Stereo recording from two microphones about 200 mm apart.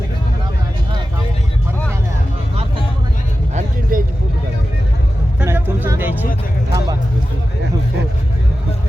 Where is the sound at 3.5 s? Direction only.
45° right (ahead or behind).